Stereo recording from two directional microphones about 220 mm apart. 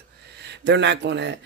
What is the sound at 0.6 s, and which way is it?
Speech, 55° right (ahead or behind).